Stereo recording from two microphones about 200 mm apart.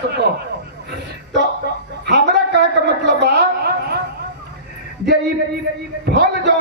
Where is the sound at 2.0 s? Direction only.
60° right (ahead or behind).